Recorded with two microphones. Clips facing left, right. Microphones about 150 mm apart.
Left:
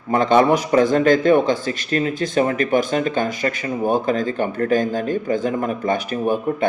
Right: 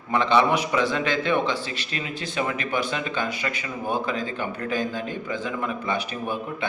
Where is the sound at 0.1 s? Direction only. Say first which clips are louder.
Left 5 dB; 45° left (ahead or behind).